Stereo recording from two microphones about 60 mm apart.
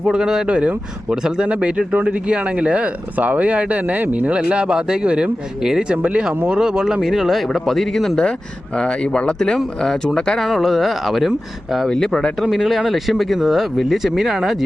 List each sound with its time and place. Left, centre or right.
0.0 s speech: centre
11.9 s speech: centre